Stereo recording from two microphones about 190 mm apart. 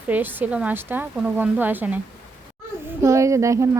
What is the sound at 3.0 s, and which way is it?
Speech, 15° right (ahead or behind).